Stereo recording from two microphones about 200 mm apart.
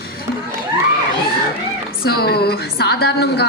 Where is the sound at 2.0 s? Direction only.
50° left (ahead or behind).